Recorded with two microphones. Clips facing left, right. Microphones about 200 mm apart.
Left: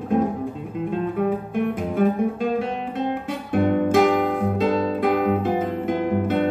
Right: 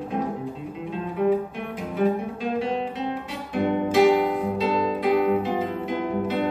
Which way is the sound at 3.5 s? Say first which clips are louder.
Left 4 dB; 50° left (ahead or behind).